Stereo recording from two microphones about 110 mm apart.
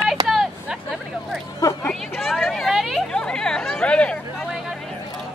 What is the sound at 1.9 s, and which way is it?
Hubbub, 5° left (ahead or behind).